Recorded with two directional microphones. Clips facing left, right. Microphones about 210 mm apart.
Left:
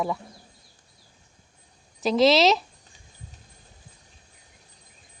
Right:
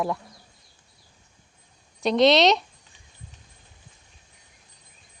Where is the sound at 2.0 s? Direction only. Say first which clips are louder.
Right 1 dB; centre (ahead or behind).